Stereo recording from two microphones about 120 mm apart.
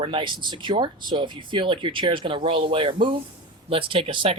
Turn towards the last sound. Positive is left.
turn(degrees=-45)  # may be behind; listen again after turning